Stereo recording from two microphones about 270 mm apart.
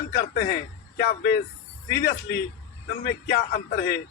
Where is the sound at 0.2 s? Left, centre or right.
Left.